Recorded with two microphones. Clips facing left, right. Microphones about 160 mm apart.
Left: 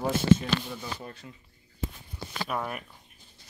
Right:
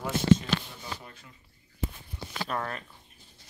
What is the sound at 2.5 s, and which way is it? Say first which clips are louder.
Speech: left 1 dB; 10° left (ahead or behind).